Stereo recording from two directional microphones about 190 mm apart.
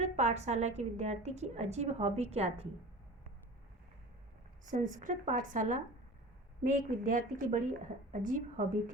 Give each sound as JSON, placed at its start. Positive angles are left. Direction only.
{"t": 0.0, "sound": "a woman's voice", "side_deg": -35}
{"t": 4.7, "sound": "speech", "side_deg": -45}